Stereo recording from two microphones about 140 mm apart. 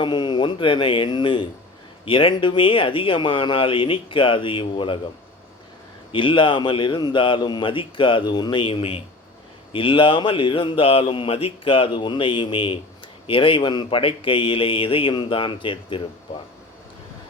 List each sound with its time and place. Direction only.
0.0 s speech: 30° left (ahead or behind)
6.1 s speech: 35° left (ahead or behind)